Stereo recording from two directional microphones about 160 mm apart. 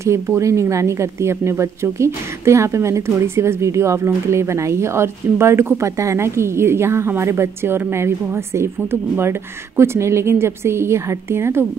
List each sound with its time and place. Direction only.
0.0 s a woman's voice: 15° right (ahead or behind)
9.8 s a woman's voice: 15° right (ahead or behind)